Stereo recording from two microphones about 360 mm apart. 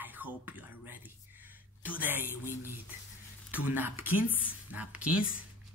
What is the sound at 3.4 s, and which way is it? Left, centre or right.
Speech, centre.